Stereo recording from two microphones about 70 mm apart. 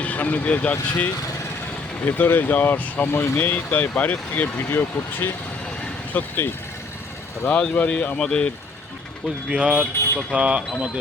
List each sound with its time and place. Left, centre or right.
0.0 s speech: left
7.5 s speech: centre
9.5 s speech: centre